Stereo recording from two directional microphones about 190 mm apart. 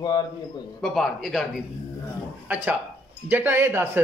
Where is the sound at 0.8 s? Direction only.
Centre (ahead or behind).